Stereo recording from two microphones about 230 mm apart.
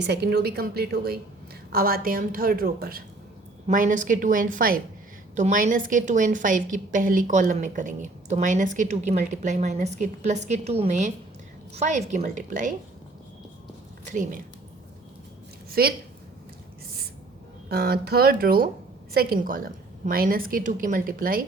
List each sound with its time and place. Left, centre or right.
0.0 s a woman's voice: right
14.1 s a woman's voice: right
15.7 s a woman's voice: right
17.7 s a woman's voice: right